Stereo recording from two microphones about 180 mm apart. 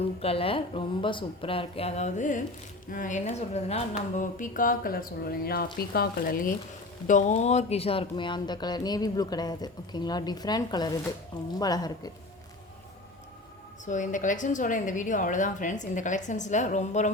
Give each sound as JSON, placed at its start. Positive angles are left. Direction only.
{"t": 0.0, "sound": "a woman's voice", "side_deg": 35}
{"t": 13.8, "sound": "a woman's voice", "side_deg": 45}